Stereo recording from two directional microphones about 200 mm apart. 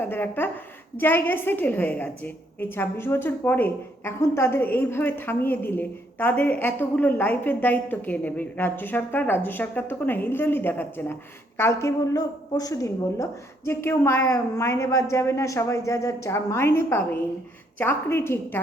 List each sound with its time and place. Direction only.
0.0 s a woman's voice: 10° left (ahead or behind)